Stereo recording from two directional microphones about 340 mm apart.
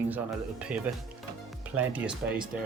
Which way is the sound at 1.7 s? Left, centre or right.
Centre.